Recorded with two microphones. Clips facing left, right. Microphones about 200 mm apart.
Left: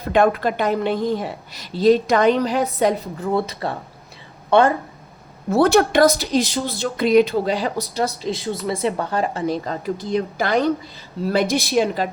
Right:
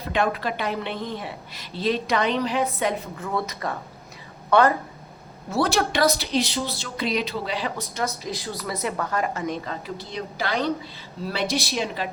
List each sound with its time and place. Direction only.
0.0 s speech: 50° left (ahead or behind); by 4.7 s 25° left (ahead or behind)
5.5 s speech: 55° left (ahead or behind); by 9.7 s 35° left (ahead or behind)
9.8 s speech: 50° left (ahead or behind)